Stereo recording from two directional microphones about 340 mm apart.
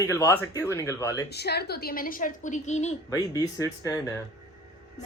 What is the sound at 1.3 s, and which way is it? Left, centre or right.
A woman's voice, left.